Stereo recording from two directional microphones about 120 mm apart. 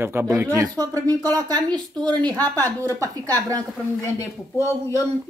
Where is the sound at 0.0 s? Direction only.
20° right (ahead or behind); by 2.3 s 35° right (ahead or behind).